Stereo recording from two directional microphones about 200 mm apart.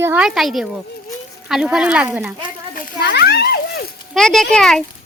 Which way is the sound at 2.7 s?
55° left (ahead or behind).